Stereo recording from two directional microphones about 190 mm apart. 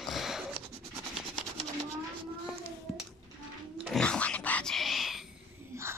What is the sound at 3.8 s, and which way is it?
Roaring cats, 5° left (ahead or behind).